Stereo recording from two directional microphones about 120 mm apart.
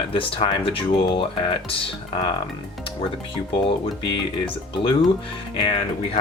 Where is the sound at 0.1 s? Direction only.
50° left (ahead or behind).